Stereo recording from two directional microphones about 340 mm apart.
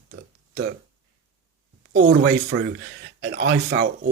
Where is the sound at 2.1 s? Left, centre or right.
Right.